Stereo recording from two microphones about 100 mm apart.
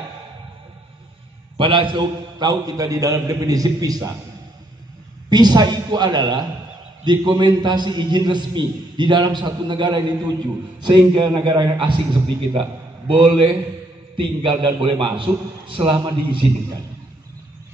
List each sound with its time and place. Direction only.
1.6 s a man's voice: 60° right (ahead or behind); by 4.1 s 35° right (ahead or behind)
5.3 s a man's voice: 45° right (ahead or behind)